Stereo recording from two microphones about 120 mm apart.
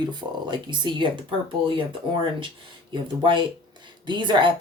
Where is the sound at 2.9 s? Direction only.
40° right (ahead or behind).